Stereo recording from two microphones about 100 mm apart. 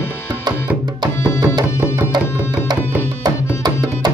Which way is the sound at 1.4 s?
45° right (ahead or behind).